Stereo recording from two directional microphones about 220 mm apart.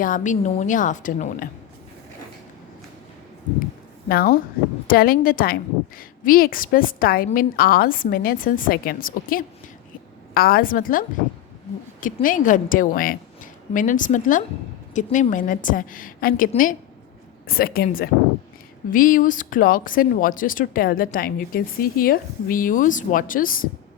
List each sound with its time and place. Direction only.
0.0 s speech: 35° left (ahead or behind)
4.1 s a woman's voice: 45° left (ahead or behind)